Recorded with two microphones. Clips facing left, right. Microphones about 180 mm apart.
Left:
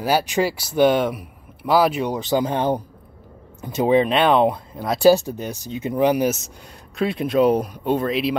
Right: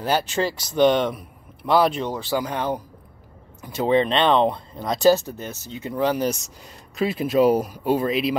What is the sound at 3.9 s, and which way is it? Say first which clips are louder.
Speech: left 1 dB; 10° left (ahead or behind).